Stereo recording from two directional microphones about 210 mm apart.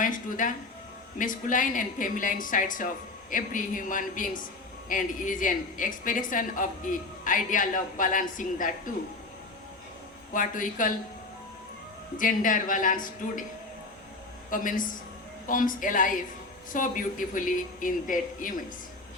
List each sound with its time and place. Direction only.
0.0 s speech: 40° left (ahead or behind)
10.3 s speech: 40° left (ahead or behind)
12.1 s speech: 40° left (ahead or behind)
14.5 s speech: 40° left (ahead or behind)